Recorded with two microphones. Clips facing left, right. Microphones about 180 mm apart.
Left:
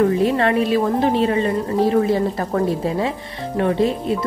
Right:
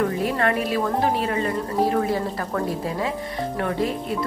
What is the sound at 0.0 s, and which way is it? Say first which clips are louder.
A woman's voice: left 6 dB; 25° left (ahead or behind).